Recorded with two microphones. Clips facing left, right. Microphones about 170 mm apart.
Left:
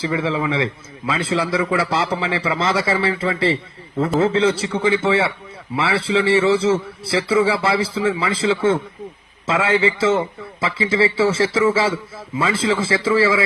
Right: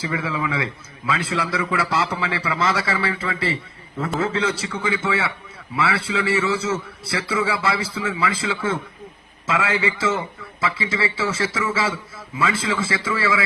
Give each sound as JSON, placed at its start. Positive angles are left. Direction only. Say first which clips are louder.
{"t": 0.0, "sound": "a man's voice", "louder": "left 5 dB", "side_deg": 25}